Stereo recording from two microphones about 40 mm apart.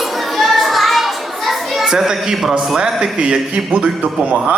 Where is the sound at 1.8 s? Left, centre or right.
Centre.